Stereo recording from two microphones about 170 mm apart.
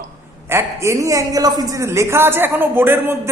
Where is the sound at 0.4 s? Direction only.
15° right (ahead or behind).